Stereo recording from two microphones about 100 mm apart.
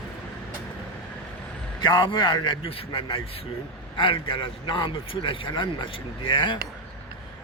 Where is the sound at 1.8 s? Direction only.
45° left (ahead or behind).